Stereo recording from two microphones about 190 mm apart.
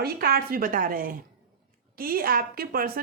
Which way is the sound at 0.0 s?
55° right (ahead or behind).